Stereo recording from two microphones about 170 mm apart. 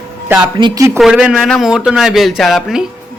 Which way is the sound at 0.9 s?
5° right (ahead or behind).